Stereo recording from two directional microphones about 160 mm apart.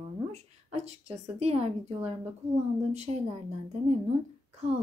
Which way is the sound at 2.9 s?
45° right (ahead or behind).